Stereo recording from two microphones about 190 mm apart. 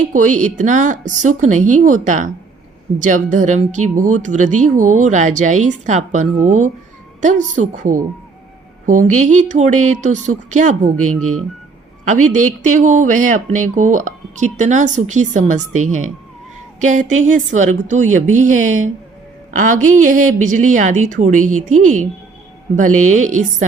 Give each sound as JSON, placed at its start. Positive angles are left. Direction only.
{"t": 0.1, "sound": "a woman's voice", "side_deg": -40}
{"t": 12.0, "sound": "a woman's voice", "side_deg": -40}